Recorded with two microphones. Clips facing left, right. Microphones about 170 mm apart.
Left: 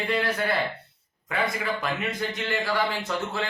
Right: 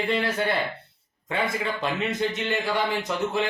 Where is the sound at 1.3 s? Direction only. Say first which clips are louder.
Right 1 dB; 25° right (ahead or behind).